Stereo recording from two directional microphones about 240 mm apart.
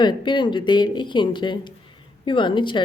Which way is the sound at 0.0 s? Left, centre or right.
Centre.